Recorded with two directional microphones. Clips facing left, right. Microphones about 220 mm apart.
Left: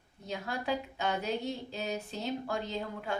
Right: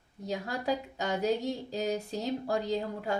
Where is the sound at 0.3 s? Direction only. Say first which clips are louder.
Right 3 dB; 40° right (ahead or behind).